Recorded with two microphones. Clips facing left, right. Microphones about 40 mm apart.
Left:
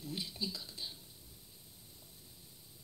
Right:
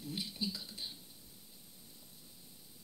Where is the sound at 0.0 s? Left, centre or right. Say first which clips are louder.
Even; right.